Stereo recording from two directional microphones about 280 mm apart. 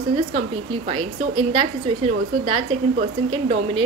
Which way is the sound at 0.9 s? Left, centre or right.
Centre.